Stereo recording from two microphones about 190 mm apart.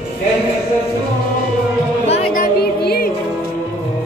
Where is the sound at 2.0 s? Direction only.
40° left (ahead or behind).